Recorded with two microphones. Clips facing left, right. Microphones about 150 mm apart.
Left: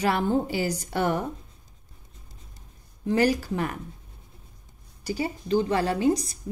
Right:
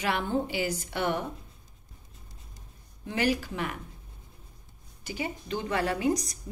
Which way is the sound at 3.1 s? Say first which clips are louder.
Left 5 dB; 40° left (ahead or behind).